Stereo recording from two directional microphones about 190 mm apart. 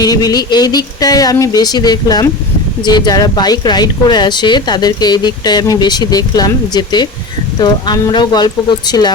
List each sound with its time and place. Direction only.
0.0 s speech: 20° left (ahead or behind)